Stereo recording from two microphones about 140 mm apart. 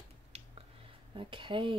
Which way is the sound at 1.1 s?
35° right (ahead or behind).